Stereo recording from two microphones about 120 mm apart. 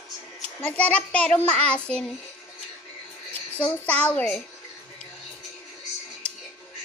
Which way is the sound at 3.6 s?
10° left (ahead or behind).